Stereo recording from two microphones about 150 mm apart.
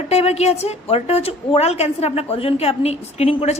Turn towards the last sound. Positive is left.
turn(degrees=45)  # may be behind; listen again after turning